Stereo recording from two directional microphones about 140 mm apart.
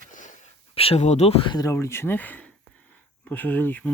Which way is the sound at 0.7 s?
45° left (ahead or behind).